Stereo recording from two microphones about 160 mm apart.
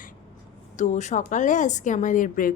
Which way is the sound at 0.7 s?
50° left (ahead or behind).